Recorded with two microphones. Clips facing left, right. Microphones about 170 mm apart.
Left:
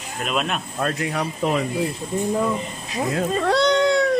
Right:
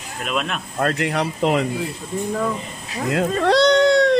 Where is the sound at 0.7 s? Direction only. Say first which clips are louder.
Right 5 dB; 70° right (ahead or behind).